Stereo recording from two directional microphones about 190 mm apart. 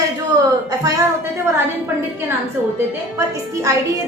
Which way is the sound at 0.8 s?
15° right (ahead or behind).